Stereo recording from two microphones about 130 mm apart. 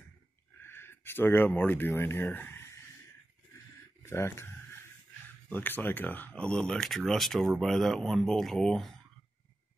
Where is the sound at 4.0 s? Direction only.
20° left (ahead or behind).